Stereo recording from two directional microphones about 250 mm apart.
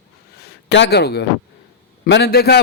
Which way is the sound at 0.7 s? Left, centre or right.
Left.